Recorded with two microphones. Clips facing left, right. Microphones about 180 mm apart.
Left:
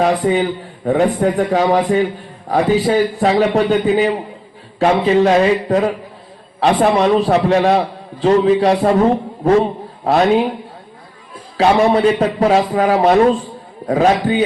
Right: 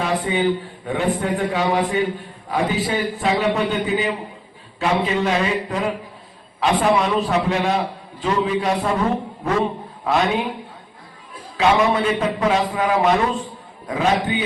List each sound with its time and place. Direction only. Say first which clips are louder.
0.0 s a man's voice: left 6 dB; 40° left (ahead or behind)
11.5 s a man's voice: left 5 dB; 35° left (ahead or behind)